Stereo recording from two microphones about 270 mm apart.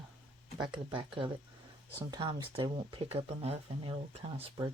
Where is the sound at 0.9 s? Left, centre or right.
Centre.